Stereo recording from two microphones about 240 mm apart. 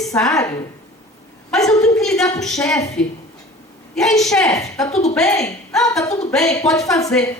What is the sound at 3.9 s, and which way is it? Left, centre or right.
Speech, centre.